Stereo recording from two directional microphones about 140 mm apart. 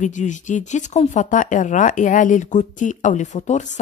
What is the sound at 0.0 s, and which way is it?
Speech, 60° left (ahead or behind).